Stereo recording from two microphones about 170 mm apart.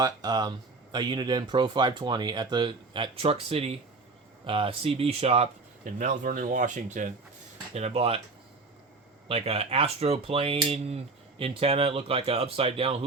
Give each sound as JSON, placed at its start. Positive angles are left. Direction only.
{"t": 0.0, "sound": "speech", "side_deg": -25}
{"t": 5.8, "sound": "speech", "side_deg": -50}
{"t": 9.3, "sound": "speech", "side_deg": -35}